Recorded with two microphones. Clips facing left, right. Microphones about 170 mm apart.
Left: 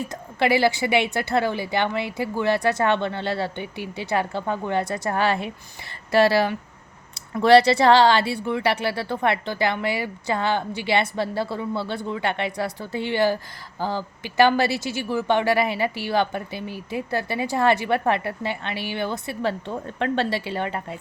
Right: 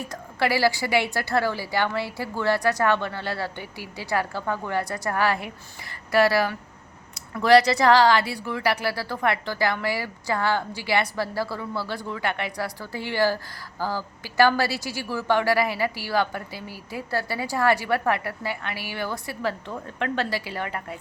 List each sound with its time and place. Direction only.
0.1 s a woman's voice: 20° left (ahead or behind)